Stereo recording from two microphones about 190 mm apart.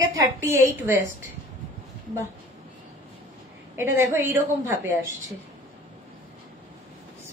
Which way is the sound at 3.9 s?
15° right (ahead or behind).